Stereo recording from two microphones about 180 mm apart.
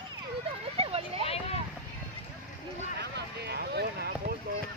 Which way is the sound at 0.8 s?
35° right (ahead or behind).